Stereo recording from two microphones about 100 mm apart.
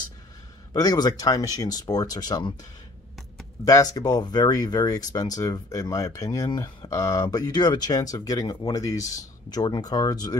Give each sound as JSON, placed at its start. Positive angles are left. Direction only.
{"t": 0.7, "sound": "speech", "side_deg": 40}
{"t": 3.6, "sound": "speech", "side_deg": 35}